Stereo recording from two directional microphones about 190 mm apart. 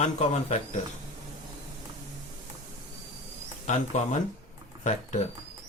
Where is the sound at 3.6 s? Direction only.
40° left (ahead or behind).